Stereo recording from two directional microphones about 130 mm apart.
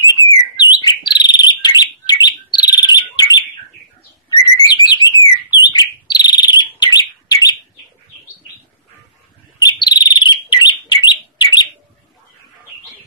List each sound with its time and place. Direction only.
0.2 s bird: 35° left (ahead or behind)
4.8 s alarm: 35° left (ahead or behind)
5.6 s bird: 35° left (ahead or behind)
9.7 s bird: 30° left (ahead or behind)